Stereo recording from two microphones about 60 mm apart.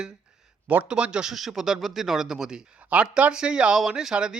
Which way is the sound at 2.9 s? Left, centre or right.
Right.